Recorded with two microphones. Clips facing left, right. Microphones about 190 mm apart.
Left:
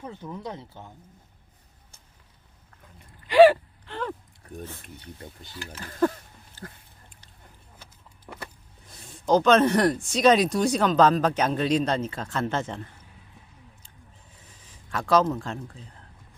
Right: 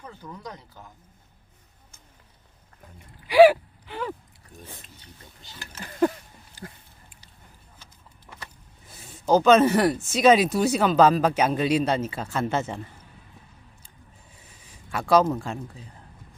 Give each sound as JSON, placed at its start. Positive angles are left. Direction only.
{"t": 0.0, "sound": "speech", "side_deg": 25}
{"t": 3.2, "sound": "a sound", "side_deg": -10}
{"t": 4.8, "sound": "speech", "side_deg": 55}
{"t": 6.0, "sound": "speech", "side_deg": -15}
{"t": 8.9, "sound": "speech", "side_deg": -5}
{"t": 14.8, "sound": "speech", "side_deg": -10}